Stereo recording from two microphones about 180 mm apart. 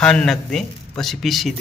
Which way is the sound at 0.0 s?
5° left (ahead or behind).